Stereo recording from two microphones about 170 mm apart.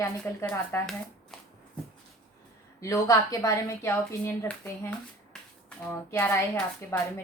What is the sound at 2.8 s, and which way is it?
A woman's voice, 20° left (ahead or behind).